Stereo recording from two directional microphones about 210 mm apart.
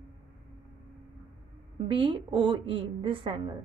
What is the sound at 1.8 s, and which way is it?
A woman's voice, 25° right (ahead or behind).